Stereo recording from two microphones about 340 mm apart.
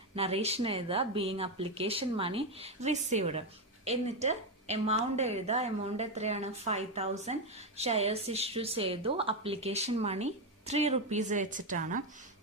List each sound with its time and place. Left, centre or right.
0.2 s a woman's voice: centre